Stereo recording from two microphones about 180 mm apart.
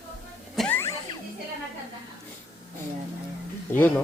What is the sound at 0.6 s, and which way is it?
Music, 10° left (ahead or behind).